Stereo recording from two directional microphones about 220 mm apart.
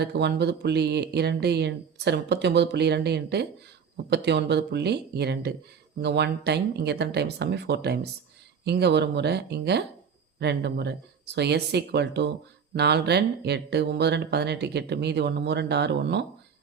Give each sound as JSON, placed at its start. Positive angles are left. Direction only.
{"t": 0.0, "sound": "speech", "side_deg": -50}